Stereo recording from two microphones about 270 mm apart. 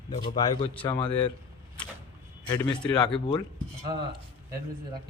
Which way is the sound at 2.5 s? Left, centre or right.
Centre.